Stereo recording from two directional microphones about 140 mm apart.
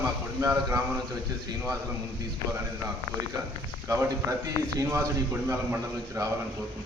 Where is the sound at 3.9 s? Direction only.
25° right (ahead or behind).